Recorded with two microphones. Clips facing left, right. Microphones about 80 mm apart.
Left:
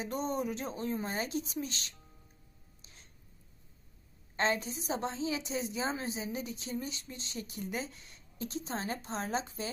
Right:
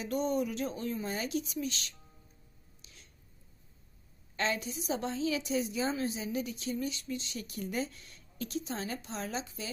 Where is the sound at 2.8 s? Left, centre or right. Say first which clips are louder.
Even; left.